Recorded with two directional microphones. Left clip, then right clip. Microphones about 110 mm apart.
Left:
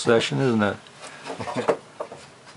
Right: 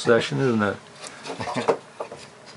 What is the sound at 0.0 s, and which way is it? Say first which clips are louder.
Speech: even; 20° left (ahead or behind).